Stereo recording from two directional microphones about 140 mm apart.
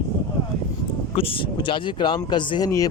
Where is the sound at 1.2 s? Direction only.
40° left (ahead or behind); by 2.9 s 25° left (ahead or behind).